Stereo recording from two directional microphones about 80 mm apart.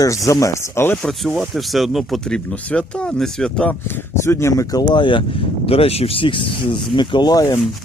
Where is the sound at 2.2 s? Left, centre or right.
Centre.